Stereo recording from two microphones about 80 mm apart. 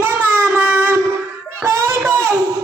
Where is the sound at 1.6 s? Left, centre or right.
Right.